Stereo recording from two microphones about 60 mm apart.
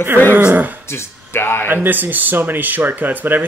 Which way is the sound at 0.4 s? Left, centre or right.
Right.